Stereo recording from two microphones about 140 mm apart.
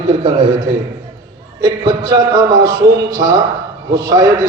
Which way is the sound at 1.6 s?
25° right (ahead or behind).